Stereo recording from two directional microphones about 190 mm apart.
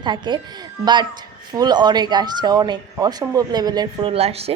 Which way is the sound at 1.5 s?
20° right (ahead or behind).